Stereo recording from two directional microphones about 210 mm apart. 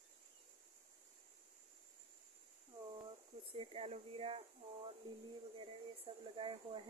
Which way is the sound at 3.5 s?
25° right (ahead or behind).